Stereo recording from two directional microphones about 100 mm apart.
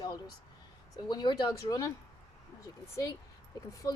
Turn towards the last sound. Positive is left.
turn(degrees=35)  # may be behind; listen again after turning